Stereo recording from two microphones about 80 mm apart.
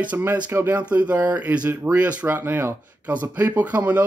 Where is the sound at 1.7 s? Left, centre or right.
Right.